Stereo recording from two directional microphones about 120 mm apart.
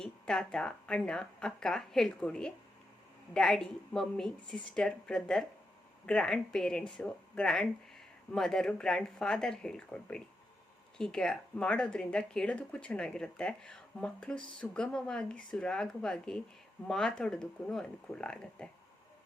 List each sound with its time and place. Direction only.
0.0 s speech: 5° left (ahead or behind)